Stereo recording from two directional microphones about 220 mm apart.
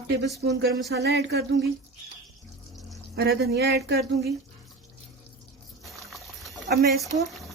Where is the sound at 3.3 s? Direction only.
45° right (ahead or behind).